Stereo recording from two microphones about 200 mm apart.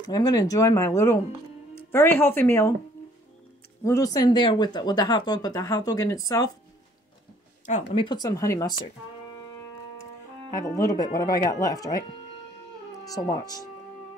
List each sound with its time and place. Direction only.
0.0 s speech: 20° left (ahead or behind)
3.8 s speech: 15° left (ahead or behind)
7.6 s speech: 30° left (ahead or behind); by 8.7 s 15° left (ahead or behind)
10.8 s speech: 20° left (ahead or behind)
13.0 s speech: 20° left (ahead or behind)